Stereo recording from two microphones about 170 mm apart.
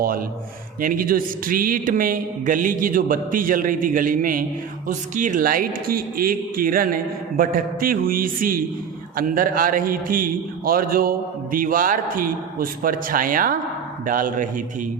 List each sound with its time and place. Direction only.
0.0 s a man's voice: 55° right (ahead or behind)